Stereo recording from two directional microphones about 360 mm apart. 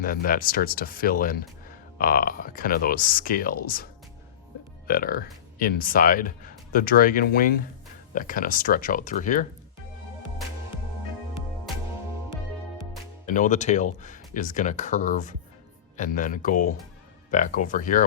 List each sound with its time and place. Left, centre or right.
0.0 s speech: left
4.9 s speech: left
13.2 s speech: left